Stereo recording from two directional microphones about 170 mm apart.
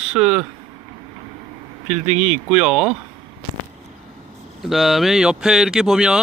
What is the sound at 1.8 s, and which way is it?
Speech, 40° right (ahead or behind).